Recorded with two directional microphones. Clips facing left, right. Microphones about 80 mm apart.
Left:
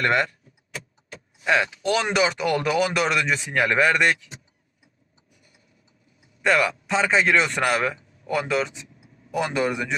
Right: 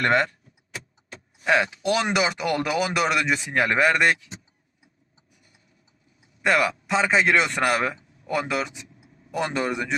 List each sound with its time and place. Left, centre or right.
0.0 s speech: right
1.5 s speech: right
2.8 s speech: centre
6.4 s a man's voice: centre
9.3 s speech: centre